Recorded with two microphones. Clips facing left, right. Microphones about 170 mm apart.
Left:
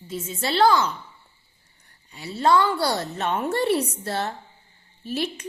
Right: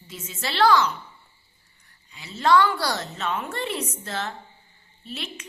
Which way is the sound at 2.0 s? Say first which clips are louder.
Left 1 dB; 40° left (ahead or behind).